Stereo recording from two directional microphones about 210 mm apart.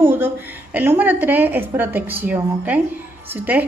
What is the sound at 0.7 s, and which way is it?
A woman's voice, 10° right (ahead or behind).